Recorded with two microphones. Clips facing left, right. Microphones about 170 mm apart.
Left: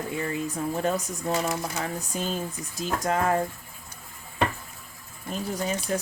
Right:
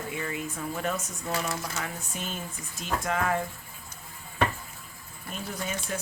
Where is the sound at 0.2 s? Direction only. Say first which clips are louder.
Left 6 dB; 35° left (ahead or behind).